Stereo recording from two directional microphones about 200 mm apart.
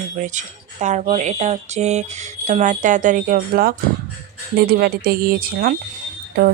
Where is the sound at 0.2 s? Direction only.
35° right (ahead or behind).